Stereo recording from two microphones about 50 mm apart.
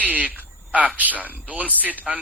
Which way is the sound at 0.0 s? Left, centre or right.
Right.